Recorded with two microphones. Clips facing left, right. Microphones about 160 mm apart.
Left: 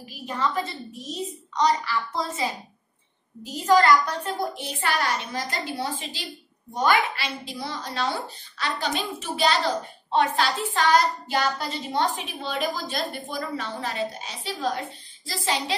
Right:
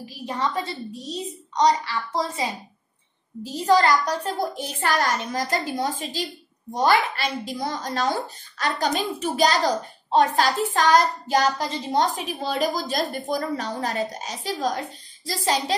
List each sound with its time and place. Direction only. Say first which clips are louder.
0.4 s a woman's voice: even; 30° right (ahead or behind)
3.6 s a woman's voice: even; 35° right (ahead or behind)